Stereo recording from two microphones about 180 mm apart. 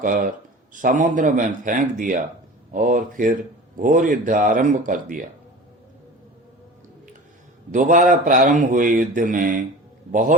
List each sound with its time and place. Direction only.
0.0 s a man's voice: 50° right (ahead or behind)
7.7 s a man's voice: 45° right (ahead or behind)